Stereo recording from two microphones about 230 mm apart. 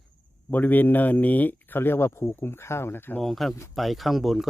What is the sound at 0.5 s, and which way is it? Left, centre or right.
Speech, centre.